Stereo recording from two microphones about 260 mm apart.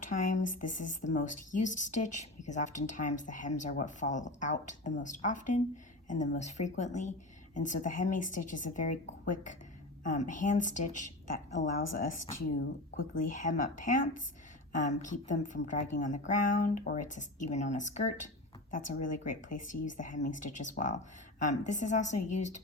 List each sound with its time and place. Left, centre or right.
0.0 s a sound: left
1.1 s a woman's voice: left
13.2 s a woman's voice: left